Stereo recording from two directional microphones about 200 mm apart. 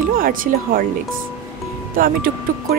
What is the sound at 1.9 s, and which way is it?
Speech, 45° right (ahead or behind).